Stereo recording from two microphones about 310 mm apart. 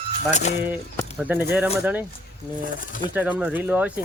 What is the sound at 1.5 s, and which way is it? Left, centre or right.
Speech, centre.